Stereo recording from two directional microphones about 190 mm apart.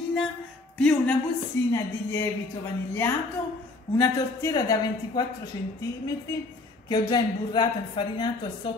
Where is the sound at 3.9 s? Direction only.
20° left (ahead or behind).